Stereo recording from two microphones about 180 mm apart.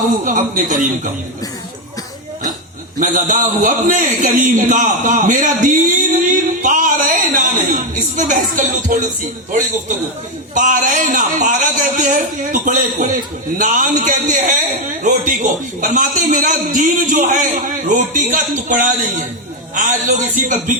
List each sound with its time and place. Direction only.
0.3 s a man's voice: 45° right (ahead or behind)
3.0 s a man's voice: 45° right (ahead or behind)
15.8 s a man's voice: 45° right (ahead or behind)